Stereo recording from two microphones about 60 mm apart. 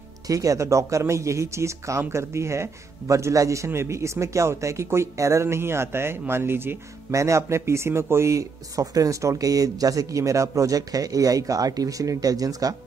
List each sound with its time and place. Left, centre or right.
0.3 s speech: right
7.1 s speech: right